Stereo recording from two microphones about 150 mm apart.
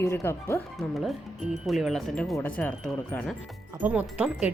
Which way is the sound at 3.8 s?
10° right (ahead or behind).